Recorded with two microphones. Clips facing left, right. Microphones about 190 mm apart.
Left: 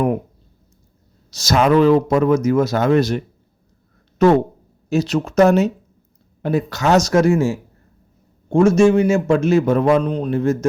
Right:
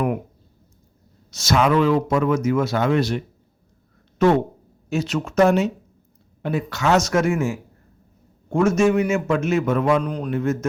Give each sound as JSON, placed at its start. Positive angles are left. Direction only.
{"t": 1.3, "sound": "a man's voice", "side_deg": 35}